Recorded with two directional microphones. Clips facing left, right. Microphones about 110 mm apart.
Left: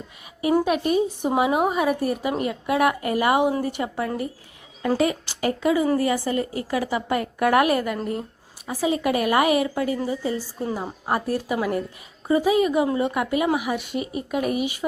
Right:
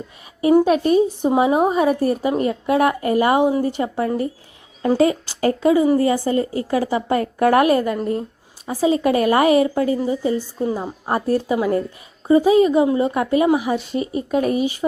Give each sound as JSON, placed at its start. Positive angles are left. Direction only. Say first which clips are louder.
{"t": 0.6, "sound": "a woman's voice", "louder": "right 6 dB", "side_deg": -35}